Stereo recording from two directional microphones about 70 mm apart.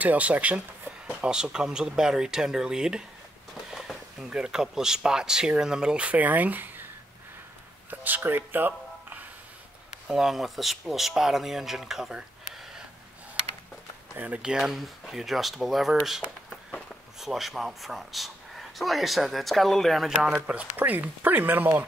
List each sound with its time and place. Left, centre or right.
0.0 s speech: right
4.3 s speech: centre; by 6.9 s right
7.9 s music: right
10.0 s speech: centre
14.1 s speech: right
14.4 s speech: centre
20.4 s speech: right